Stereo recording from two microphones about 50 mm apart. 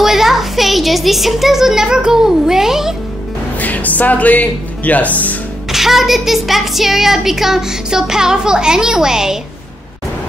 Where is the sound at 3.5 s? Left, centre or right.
Left.